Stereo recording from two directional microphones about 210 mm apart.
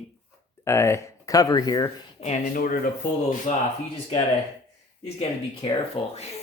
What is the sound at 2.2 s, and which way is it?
Speech, 35° left (ahead or behind).